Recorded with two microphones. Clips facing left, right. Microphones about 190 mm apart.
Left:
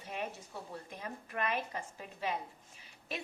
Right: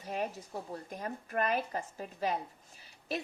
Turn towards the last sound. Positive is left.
turn(degrees=-35)  # may be behind; listen again after turning